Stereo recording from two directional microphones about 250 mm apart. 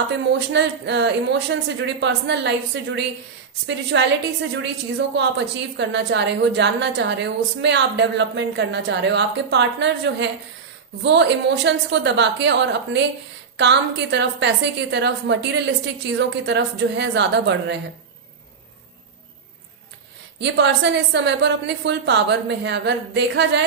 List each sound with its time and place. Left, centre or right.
0.3 s a woman's voice: right
20.4 s a woman's voice: right